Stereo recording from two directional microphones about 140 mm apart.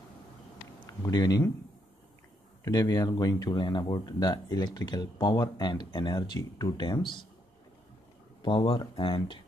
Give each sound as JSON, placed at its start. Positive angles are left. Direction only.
{"t": 0.8, "sound": "speech", "side_deg": 25}
{"t": 2.6, "sound": "speech", "side_deg": 30}
{"t": 8.4, "sound": "speech", "side_deg": 35}